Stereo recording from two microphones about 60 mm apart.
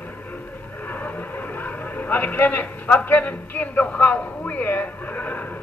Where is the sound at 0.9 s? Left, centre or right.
Left.